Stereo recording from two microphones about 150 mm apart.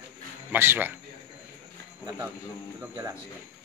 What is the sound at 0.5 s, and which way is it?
Speech, 15° right (ahead or behind).